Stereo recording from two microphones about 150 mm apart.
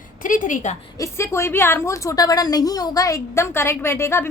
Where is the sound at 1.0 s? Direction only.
20° left (ahead or behind).